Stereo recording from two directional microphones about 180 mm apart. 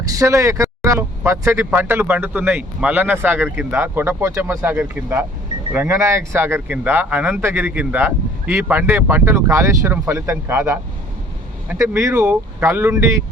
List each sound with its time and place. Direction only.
0.2 s speech: 15° right (ahead or behind)